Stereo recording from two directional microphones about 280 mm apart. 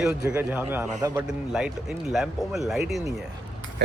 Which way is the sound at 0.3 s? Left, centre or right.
Centre.